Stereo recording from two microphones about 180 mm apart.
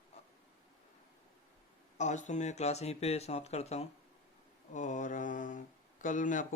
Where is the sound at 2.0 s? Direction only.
40° left (ahead or behind).